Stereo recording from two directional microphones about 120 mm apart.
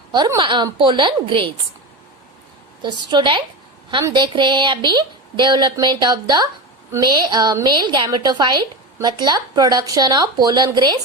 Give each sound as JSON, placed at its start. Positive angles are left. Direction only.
{"t": 0.3, "sound": "a woman's voice", "side_deg": -40}
{"t": 2.8, "sound": "a woman's voice", "side_deg": -40}